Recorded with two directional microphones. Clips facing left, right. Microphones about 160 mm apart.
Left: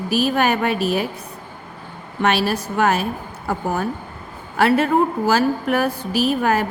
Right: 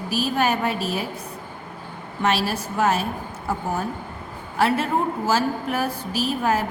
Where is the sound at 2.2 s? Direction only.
65° left (ahead or behind).